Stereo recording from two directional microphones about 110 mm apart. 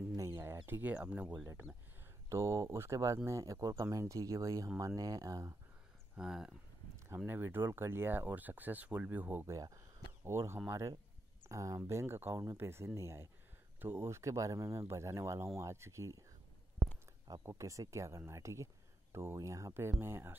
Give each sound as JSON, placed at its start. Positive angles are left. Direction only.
{"t": 0.2, "sound": "a sound", "side_deg": -25}
{"t": 0.7, "sound": "speech", "side_deg": -15}
{"t": 1.3, "sound": "speech", "side_deg": -25}
{"t": 6.1, "sound": "speech", "side_deg": -5}
{"t": 7.2, "sound": "speech", "side_deg": -20}
{"t": 9.5, "sound": "speech", "side_deg": -30}
{"t": 17.4, "sound": "speech", "side_deg": -25}